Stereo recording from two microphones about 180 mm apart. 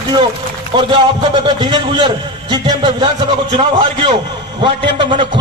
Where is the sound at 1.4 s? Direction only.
25° right (ahead or behind).